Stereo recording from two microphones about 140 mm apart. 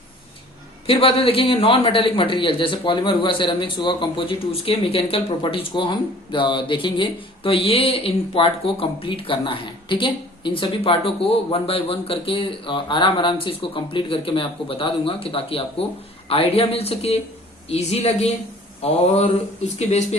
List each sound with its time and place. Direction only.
0.9 s a man's voice: 40° left (ahead or behind)